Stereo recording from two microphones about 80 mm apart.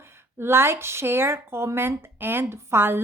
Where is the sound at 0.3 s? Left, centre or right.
Right.